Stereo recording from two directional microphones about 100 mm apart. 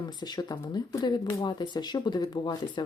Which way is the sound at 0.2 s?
45° left (ahead or behind).